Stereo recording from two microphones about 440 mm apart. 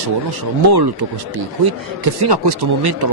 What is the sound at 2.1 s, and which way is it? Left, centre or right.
Speech, right.